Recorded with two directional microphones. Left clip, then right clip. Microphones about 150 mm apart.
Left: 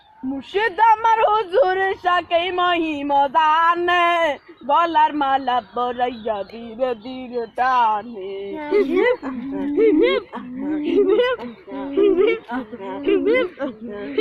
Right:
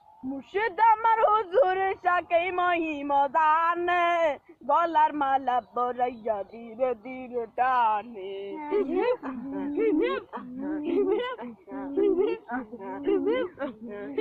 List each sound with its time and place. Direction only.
0.5 s a man's voice: 5° right (ahead or behind)
13.6 s a woman's voice: 25° left (ahead or behind)